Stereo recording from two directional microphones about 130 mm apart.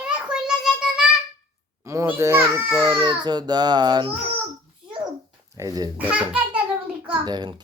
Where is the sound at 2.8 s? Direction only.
35° right (ahead or behind).